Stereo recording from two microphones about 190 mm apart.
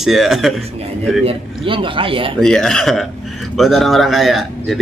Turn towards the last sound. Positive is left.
turn(degrees=0)  # may be behind; listen again after turning